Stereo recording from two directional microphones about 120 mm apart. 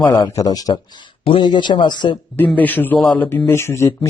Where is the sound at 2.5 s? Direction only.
15° left (ahead or behind).